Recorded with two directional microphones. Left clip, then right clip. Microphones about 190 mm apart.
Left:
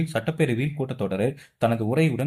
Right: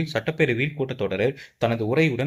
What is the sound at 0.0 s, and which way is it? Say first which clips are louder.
Speech: right 2 dB; 15° right (ahead or behind).